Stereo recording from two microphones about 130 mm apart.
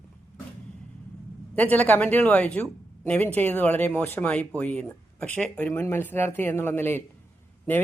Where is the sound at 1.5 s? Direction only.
10° left (ahead or behind).